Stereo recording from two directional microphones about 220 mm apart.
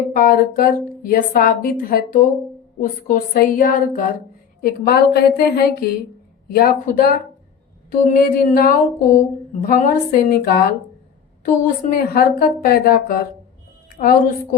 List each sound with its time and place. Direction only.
0.1 s a woman's voice: 40° left (ahead or behind)
11.6 s a woman's voice: 40° left (ahead or behind)